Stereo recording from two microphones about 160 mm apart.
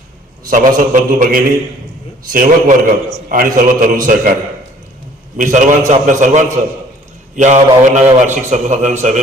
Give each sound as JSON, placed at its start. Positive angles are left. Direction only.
{"t": 0.5, "sound": "a man's voice", "side_deg": -55}
{"t": 5.4, "sound": "a man's voice", "side_deg": -50}